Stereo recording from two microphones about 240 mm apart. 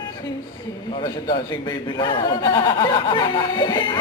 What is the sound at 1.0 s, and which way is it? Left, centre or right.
Speech, centre.